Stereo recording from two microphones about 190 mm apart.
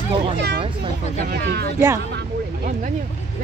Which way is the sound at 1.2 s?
55° right (ahead or behind).